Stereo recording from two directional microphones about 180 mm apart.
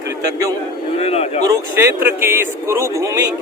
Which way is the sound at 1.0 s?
35° left (ahead or behind).